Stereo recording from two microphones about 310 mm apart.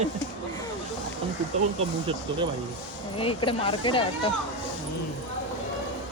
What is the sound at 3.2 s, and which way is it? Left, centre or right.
Speech, centre.